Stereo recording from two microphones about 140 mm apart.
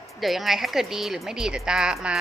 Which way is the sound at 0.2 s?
Centre (ahead or behind).